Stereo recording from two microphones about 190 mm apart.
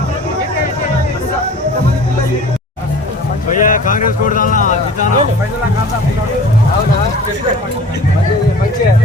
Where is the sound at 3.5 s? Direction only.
45° left (ahead or behind).